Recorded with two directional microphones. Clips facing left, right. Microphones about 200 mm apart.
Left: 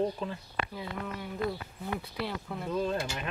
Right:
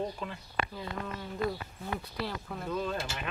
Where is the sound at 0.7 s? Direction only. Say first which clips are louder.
Left 1 dB; 10° left (ahead or behind).